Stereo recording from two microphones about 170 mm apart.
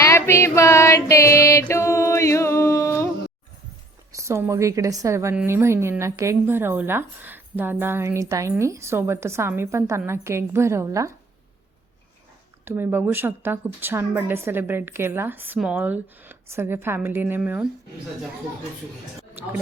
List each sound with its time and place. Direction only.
0.0 s female singing: 15° left (ahead or behind)
4.1 s a woman's voice: 15° right (ahead or behind)
12.6 s a woman's voice: 15° right (ahead or behind)